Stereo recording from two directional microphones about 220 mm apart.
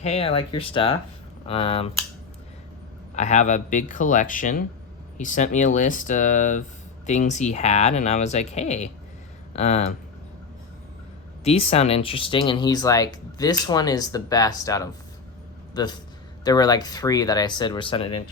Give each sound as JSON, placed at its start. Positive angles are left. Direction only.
{"t": 0.0, "sound": "speech", "side_deg": 30}
{"t": 3.2, "sound": "speech", "side_deg": 30}
{"t": 11.4, "sound": "a man's voice", "side_deg": 25}